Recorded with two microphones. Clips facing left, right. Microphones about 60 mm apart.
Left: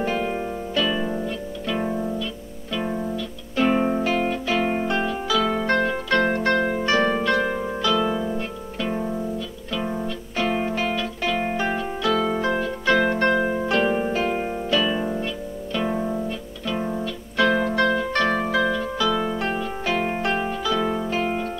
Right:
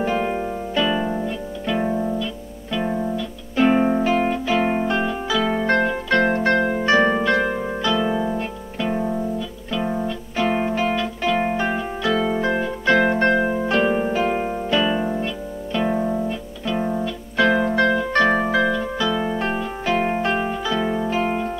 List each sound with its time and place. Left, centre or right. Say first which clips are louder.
0.0 s music: right 3 dB; centre
5.3 s music: right 1 dB; centre
6.6 s harp: right 3 dB; centre
9.7 s music: right 3 dB; centre
13.7 s harp: right 2 dB; centre
14.7 s music: right 2 dB; centre